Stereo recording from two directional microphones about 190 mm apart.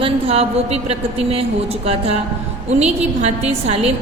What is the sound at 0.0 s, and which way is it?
A woman's voice, 30° right (ahead or behind).